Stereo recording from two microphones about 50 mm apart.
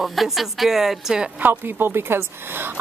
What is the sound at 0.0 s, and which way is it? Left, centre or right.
A woman's voice, centre.